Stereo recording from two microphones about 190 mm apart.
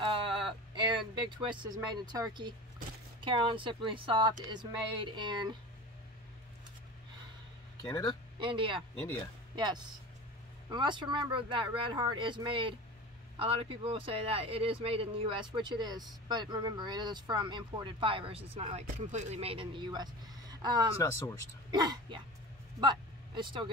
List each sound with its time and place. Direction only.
0.0 s a sound: 30° right (ahead or behind)
3.2 s speech: 25° right (ahead or behind)
7.8 s speech: 20° left (ahead or behind)
8.4 s speech: 25° right (ahead or behind)
10.7 s speech: 25° right (ahead or behind)
21.0 s speech: 15° left (ahead or behind)
21.7 s speech: 20° right (ahead or behind)